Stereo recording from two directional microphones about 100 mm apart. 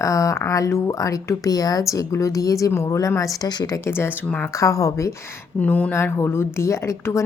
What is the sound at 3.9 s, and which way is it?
Speech, 25° left (ahead or behind).